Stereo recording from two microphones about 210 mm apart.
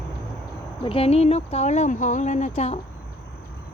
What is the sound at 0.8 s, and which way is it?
Speech, 25° left (ahead or behind).